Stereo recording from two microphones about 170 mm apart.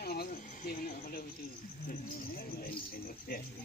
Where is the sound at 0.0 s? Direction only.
65° left (ahead or behind).